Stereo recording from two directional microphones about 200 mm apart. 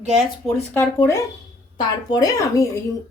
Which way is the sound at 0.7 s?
10° left (ahead or behind).